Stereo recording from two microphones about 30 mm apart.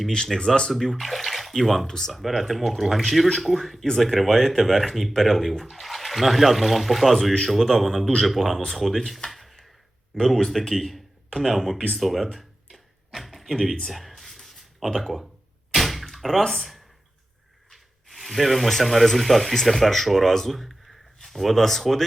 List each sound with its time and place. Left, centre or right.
0.3 s speech: left
0.7 s speech: centre
1.9 s speech: centre
2.2 s speech: centre
11.9 s a sound: centre
14.9 s speech: centre
15.7 s a sound: centre
16.5 s speech: centre